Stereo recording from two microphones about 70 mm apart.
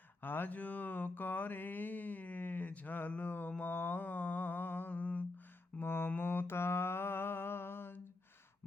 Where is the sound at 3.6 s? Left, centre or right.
Left.